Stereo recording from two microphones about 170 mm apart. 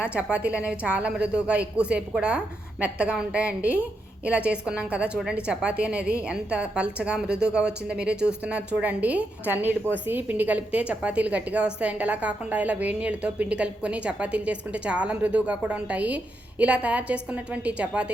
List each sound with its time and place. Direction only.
0.1 s a woman's voice: 5° right (ahead or behind)